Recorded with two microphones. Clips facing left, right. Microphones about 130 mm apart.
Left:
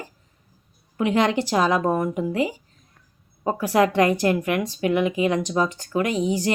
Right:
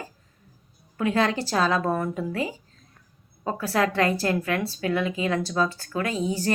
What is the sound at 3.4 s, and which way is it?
Speech, 15° left (ahead or behind).